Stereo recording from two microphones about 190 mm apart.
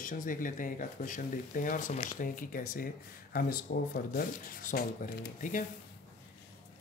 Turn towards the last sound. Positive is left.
turn(degrees=45)  # may be behind; listen again after turning